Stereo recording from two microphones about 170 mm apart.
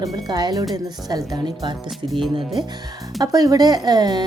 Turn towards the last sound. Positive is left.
turn(degrees=-25)  # may be behind; listen again after turning